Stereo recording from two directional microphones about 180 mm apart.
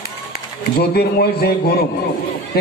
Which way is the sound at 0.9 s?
60° left (ahead or behind).